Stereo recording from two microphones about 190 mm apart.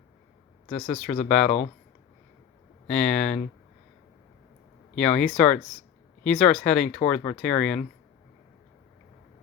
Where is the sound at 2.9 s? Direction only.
5° left (ahead or behind).